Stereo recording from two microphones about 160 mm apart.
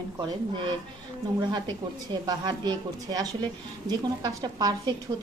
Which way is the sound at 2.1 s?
25° right (ahead or behind).